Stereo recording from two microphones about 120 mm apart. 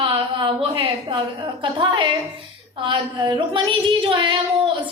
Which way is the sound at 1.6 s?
40° right (ahead or behind).